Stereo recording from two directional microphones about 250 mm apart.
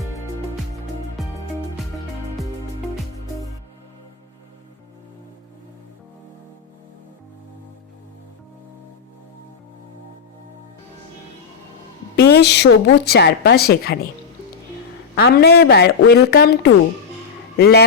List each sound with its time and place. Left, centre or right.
12.1 s a woman's voice: left
15.1 s a woman's voice: left